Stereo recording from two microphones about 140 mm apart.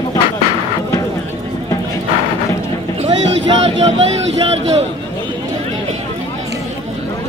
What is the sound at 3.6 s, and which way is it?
Speech, 50° right (ahead or behind).